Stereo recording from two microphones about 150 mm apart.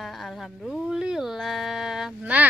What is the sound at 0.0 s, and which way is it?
Speech, centre (ahead or behind).